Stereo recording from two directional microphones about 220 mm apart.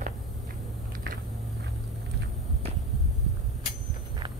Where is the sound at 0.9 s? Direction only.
40° right (ahead or behind).